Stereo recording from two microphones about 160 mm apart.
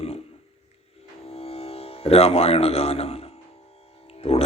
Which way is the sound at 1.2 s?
40° left (ahead or behind).